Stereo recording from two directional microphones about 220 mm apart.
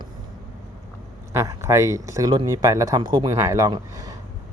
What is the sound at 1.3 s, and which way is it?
Speech, 15° right (ahead or behind).